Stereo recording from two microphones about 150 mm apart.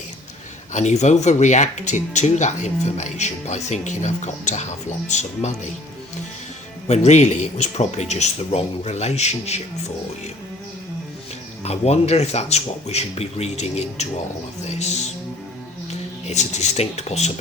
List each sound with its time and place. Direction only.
0.7 s speech: 50° left (ahead or behind)
6.8 s speech: 50° left (ahead or behind)
11.6 s speech: 45° left (ahead or behind)